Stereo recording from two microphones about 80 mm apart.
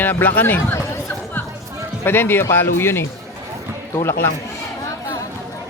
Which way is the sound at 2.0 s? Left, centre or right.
Left.